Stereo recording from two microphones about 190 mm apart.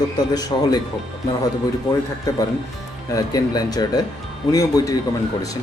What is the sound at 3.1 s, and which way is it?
Speech, 20° left (ahead or behind).